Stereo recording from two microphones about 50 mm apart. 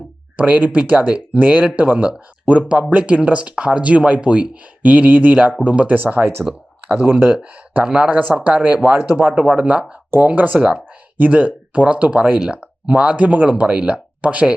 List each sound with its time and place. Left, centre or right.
0.3 s speech: right
6.0 s speech: right
6.5 s speech: centre
6.9 s speech: right
7.9 s speech: right
8.2 s speech: right